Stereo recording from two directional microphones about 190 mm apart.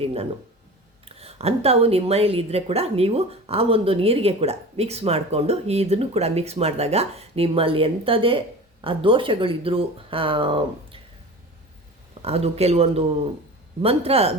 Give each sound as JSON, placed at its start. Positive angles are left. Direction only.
{"t": 0.0, "sound": "a woman's voice", "side_deg": -30}
{"t": 12.2, "sound": "a woman's voice", "side_deg": -35}